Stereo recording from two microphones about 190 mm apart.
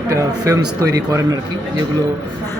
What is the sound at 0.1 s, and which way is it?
Speech, 15° right (ahead or behind).